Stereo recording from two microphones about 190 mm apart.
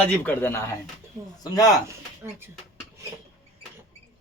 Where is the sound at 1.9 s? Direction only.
15° right (ahead or behind).